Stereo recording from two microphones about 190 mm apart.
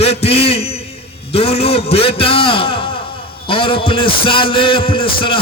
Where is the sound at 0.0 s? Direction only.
30° left (ahead or behind).